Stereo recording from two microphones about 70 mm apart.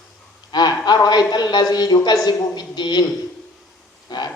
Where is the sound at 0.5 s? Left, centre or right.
Left.